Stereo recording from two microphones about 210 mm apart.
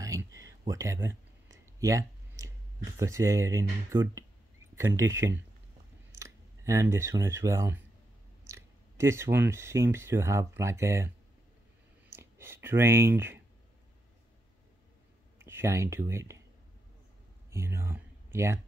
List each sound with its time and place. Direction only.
0.0 s a sound: 15° right (ahead or behind)
3.0 s speech: 15° right (ahead or behind)
15.4 s speech: 10° right (ahead or behind)
17.5 s speech: 10° right (ahead or behind)